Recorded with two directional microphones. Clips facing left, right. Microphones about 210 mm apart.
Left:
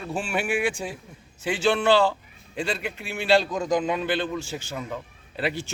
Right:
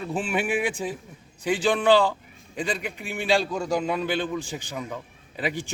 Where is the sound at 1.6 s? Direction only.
15° right (ahead or behind).